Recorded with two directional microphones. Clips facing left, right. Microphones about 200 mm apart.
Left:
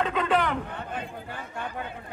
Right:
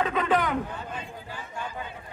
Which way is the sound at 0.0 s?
5° right (ahead or behind).